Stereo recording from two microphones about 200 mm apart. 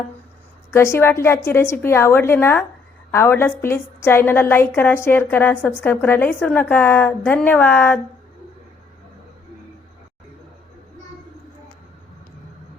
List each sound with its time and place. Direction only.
0.7 s a woman's voice: 15° left (ahead or behind)